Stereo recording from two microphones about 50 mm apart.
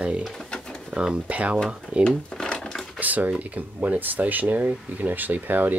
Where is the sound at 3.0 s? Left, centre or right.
Right.